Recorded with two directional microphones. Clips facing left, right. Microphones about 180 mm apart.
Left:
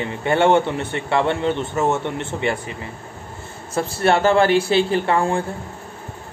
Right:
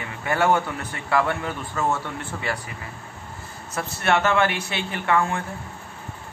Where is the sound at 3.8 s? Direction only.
30° left (ahead or behind).